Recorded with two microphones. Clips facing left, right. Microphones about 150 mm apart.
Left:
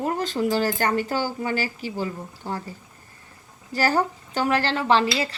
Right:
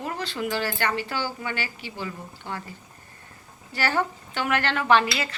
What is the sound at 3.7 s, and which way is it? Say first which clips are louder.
Speech: left 4 dB; 40° left (ahead or behind).